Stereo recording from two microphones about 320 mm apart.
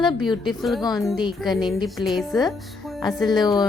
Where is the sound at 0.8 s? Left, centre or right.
Centre.